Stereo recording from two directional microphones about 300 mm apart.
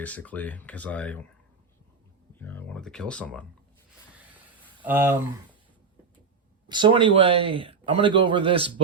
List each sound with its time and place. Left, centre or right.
0.0 s speech: centre
2.3 s speech: centre
4.8 s speech: centre
6.7 s a man's voice: centre